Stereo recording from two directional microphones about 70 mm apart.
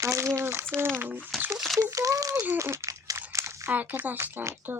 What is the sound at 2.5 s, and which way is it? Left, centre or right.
Speech, right.